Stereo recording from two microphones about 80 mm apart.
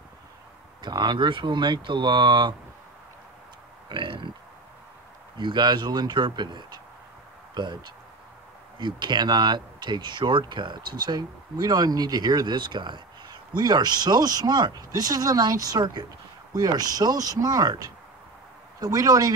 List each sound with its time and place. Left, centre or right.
0.8 s speech: right
3.9 s burping: right
5.4 s speech: right
15.8 s speech: right
16.5 s speech: right